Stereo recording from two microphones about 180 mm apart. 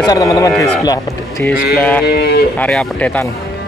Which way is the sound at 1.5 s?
60° left (ahead or behind).